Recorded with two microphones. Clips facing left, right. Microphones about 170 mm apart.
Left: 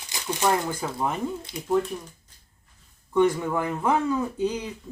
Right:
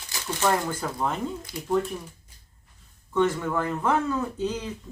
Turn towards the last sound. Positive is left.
turn(degrees=15)  # may be behind; listen again after turning